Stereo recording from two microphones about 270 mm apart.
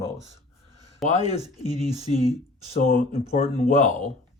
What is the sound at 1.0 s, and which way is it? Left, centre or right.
Speech, left.